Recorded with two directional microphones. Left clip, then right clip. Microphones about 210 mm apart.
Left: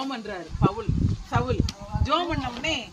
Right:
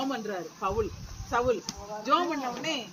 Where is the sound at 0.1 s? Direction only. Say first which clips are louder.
Even; 25° left (ahead or behind).